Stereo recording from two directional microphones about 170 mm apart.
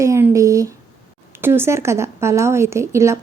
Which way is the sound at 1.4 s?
15° right (ahead or behind).